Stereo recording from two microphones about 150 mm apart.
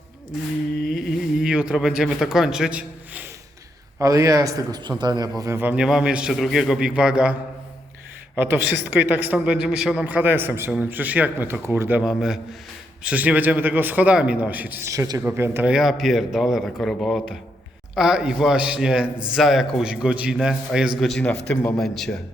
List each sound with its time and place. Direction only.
0.9 s a sound: 5° right (ahead or behind)
3.9 s a man's voice: 20° right (ahead or behind)
5.4 s a man's voice: 15° right (ahead or behind)
8.4 s a man's voice: 15° right (ahead or behind)
15.2 s a man's voice: 10° right (ahead or behind)
15.7 s a man's voice: centre (ahead or behind)
21.5 s a man's voice: 15° left (ahead or behind)
21.8 s a man's voice: centre (ahead or behind)